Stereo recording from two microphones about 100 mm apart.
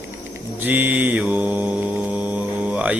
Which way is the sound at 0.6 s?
20° right (ahead or behind).